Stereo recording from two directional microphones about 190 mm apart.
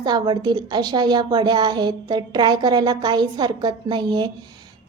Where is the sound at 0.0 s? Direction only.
20° right (ahead or behind).